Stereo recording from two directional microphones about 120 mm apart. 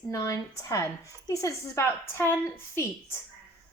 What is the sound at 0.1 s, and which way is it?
A woman's voice, 25° left (ahead or behind).